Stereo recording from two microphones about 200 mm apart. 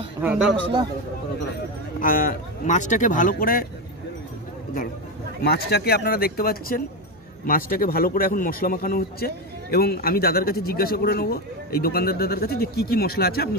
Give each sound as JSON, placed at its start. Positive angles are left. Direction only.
{"t": 0.2, "sound": "a man's voice", "side_deg": -5}
{"t": 2.0, "sound": "a man's voice", "side_deg": 45}
{"t": 5.4, "sound": "a man's voice", "side_deg": 55}